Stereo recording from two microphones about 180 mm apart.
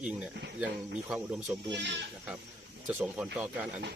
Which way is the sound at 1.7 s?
75° right (ahead or behind).